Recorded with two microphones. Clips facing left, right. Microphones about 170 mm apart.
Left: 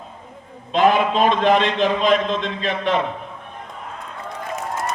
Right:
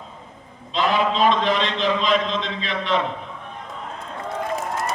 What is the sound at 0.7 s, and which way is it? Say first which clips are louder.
A man's voice: left 4 dB; 50° left (ahead or behind).